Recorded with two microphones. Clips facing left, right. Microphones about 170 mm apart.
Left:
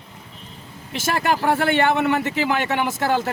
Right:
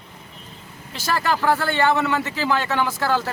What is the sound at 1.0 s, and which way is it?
Speech, 25° left (ahead or behind).